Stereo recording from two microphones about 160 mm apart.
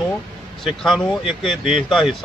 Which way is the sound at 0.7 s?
Centre (ahead or behind).